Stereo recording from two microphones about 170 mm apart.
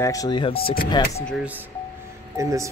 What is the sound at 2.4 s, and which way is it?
Speech, 20° right (ahead or behind).